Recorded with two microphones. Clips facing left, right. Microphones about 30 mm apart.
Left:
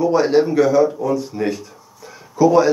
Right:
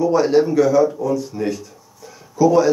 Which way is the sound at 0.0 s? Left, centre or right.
Centre.